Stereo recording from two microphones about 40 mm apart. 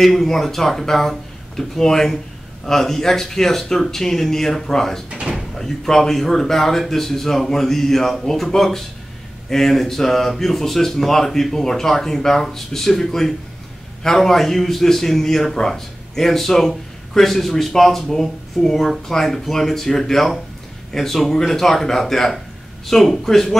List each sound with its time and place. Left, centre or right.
0.0 s a man's voice: centre